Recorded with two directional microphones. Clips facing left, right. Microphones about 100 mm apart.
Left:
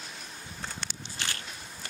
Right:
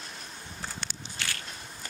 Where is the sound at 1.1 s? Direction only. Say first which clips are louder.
Even; 25° left (ahead or behind).